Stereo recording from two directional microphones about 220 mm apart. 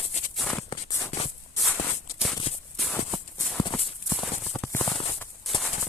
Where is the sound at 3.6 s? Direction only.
20° left (ahead or behind).